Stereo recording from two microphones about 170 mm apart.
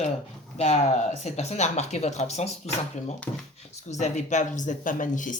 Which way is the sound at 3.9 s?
45° left (ahead or behind).